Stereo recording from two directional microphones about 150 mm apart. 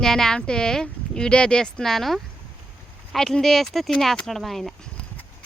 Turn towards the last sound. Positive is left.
turn(degrees=0)  # may be behind; listen again after turning